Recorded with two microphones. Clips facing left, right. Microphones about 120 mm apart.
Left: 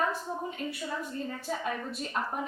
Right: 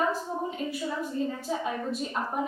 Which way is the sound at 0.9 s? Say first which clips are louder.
Right 5 dB; 5° right (ahead or behind).